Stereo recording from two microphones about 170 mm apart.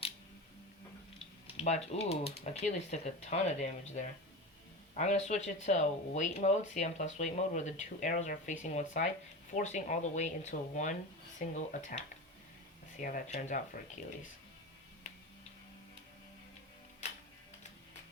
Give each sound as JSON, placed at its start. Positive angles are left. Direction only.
{"t": 1.5, "sound": "speech", "side_deg": 40}